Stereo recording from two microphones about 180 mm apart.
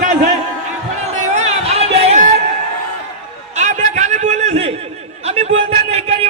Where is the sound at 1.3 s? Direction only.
35° right (ahead or behind).